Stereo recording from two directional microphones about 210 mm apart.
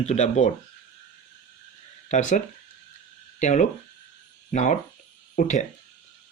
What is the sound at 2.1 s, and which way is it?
Speech, 35° left (ahead or behind).